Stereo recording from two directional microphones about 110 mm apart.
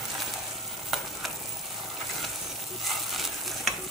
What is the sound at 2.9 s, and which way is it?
Stir, centre (ahead or behind).